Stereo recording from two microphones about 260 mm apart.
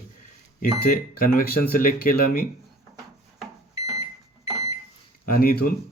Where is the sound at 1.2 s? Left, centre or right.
Left.